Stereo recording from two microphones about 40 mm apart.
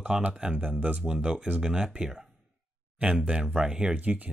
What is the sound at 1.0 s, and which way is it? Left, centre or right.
Speech, centre.